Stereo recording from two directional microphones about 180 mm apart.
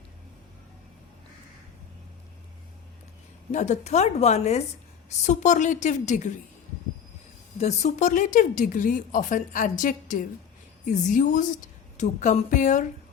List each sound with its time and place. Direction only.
3.5 s a woman's voice: 40° left (ahead or behind)
7.6 s speech: 40° left (ahead or behind)